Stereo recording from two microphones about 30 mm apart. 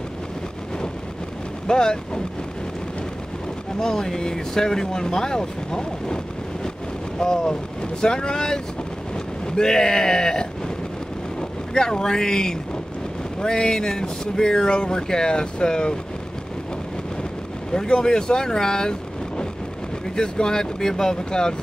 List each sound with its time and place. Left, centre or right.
1.7 s speech: left
3.8 s speech: left
7.2 s speech: left
11.7 s speech: left
17.7 s speech: left